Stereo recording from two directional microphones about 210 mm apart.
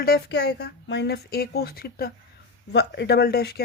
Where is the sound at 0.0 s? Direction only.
50° left (ahead or behind).